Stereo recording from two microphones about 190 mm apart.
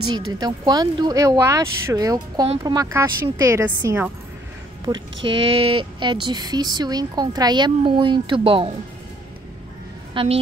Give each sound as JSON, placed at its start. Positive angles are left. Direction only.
{"t": 0.3, "sound": "speech", "side_deg": -20}
{"t": 4.9, "sound": "speech", "side_deg": -20}
{"t": 10.1, "sound": "a woman's voice", "side_deg": -30}